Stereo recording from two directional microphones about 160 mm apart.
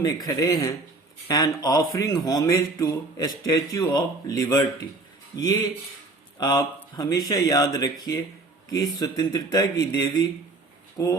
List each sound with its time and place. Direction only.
0.0 s speech: 20° left (ahead or behind)